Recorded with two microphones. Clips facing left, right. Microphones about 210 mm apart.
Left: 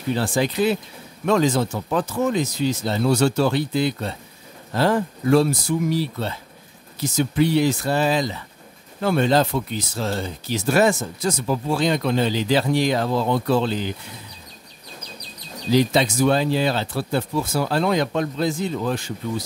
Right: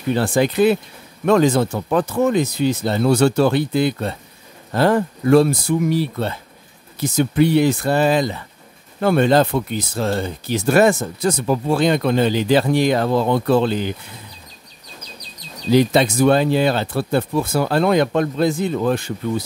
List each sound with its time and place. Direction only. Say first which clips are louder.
0.1 s speech: right 4 dB; 55° right (ahead or behind)
15.7 s speech: right 4 dB; 55° right (ahead or behind)